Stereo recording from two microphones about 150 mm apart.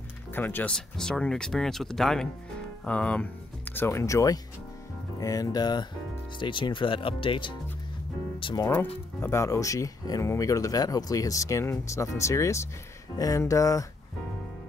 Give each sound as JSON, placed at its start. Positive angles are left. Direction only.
{"t": 0.3, "sound": "speech", "side_deg": 15}
{"t": 8.6, "sound": "speech", "side_deg": 15}